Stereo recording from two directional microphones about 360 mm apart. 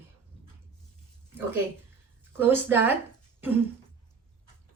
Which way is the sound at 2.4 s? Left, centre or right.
Centre.